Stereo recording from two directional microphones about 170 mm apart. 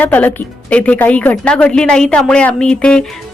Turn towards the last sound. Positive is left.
turn(degrees=5)  # may be behind; listen again after turning